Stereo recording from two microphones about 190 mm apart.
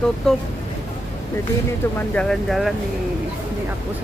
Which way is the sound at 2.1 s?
5° left (ahead or behind).